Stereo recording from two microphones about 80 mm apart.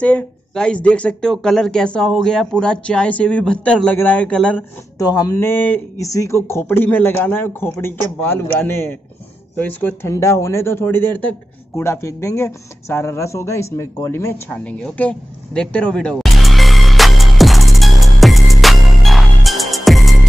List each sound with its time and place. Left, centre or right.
0.0 s speech: centre
4.9 s speech: left
5.4 s speech: left
5.9 s speech: left
10.0 s speech: left
11.7 s speech: left
14.5 s speech: centre
16.2 s music: centre